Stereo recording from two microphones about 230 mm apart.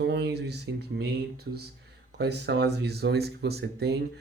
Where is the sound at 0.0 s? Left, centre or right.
Right.